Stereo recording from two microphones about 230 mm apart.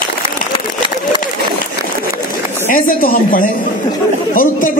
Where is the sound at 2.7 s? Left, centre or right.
Left.